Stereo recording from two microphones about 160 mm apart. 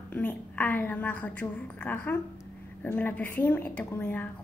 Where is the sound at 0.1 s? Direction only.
10° left (ahead or behind).